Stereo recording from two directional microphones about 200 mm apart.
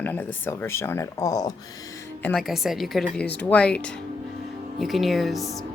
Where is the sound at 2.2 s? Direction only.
5° left (ahead or behind).